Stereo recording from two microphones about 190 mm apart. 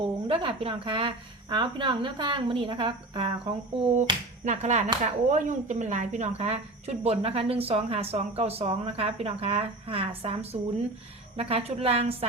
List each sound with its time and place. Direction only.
0.0 s a woman's voice: 25° right (ahead or behind)